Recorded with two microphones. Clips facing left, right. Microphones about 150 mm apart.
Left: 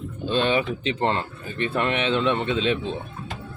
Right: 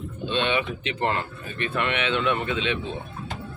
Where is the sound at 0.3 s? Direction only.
40° left (ahead or behind).